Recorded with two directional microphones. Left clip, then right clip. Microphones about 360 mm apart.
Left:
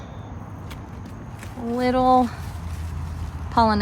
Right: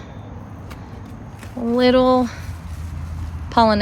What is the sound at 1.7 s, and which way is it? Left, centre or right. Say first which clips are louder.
Speech: right 3 dB; centre.